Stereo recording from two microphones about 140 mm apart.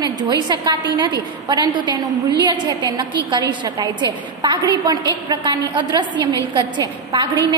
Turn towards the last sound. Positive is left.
turn(degrees=-35)  # may be behind; listen again after turning